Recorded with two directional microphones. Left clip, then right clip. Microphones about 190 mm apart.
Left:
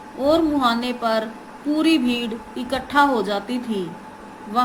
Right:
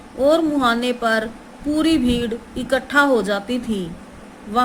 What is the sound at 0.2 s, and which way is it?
A woman's voice, 45° right (ahead or behind).